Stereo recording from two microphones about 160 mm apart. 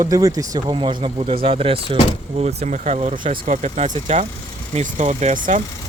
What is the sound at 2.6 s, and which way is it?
Speech, 50° right (ahead or behind).